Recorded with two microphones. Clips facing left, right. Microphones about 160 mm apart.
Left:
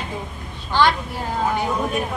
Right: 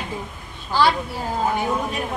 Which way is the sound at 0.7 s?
10° right (ahead or behind).